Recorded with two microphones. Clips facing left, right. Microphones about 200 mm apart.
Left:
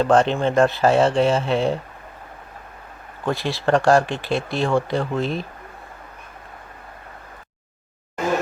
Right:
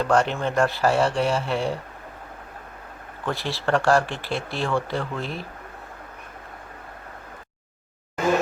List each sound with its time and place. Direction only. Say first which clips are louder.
0.0 s speech: left 4 dB; 25° left (ahead or behind)
3.2 s speech: left 4 dB; 15° left (ahead or behind)